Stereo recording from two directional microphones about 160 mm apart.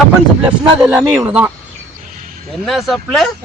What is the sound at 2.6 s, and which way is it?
Speech, centre (ahead or behind).